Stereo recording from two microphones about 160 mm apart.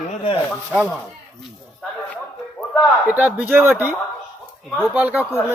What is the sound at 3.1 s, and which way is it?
Speech, 10° right (ahead or behind).